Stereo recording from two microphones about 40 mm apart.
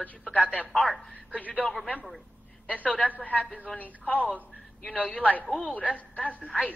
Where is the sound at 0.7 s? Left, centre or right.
Centre.